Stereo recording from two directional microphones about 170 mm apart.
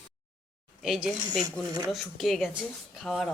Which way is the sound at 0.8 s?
5° right (ahead or behind).